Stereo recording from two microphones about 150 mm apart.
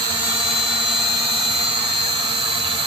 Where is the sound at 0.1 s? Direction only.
35° right (ahead or behind).